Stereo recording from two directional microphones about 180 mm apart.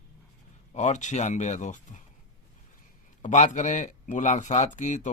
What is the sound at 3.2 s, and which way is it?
Speech, 45° left (ahead or behind).